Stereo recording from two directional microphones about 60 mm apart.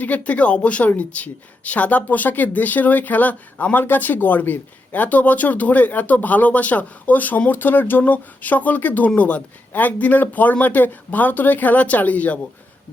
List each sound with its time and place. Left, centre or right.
0.0 s a woman's voice: left